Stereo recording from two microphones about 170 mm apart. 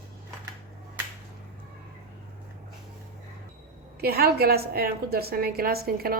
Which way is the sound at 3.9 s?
65° right (ahead or behind).